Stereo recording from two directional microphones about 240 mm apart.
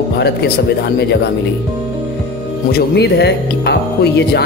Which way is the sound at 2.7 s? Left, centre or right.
Left.